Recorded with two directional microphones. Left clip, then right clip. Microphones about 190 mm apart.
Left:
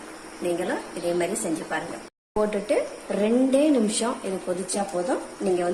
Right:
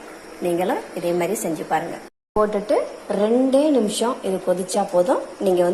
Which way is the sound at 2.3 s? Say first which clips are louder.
Right 4 dB; centre (ahead or behind).